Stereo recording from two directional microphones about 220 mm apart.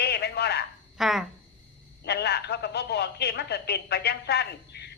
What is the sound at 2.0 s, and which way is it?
Speech, 50° left (ahead or behind).